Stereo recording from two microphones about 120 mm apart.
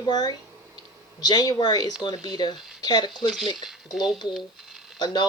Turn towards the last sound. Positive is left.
turn(degrees=35)  # may be behind; listen again after turning